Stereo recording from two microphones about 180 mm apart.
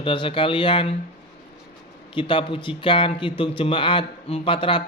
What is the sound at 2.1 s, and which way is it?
A man's voice, 30° left (ahead or behind).